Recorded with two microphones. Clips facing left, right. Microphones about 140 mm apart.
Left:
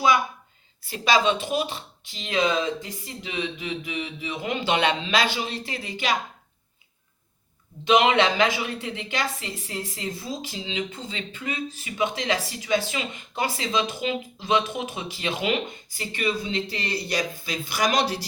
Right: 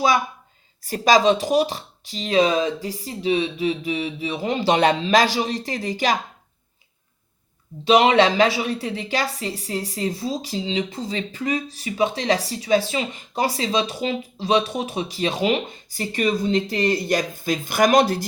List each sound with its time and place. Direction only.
0.8 s speech: 45° right (ahead or behind)
7.9 s speech: 35° right (ahead or behind); by 18.3 s 50° right (ahead or behind)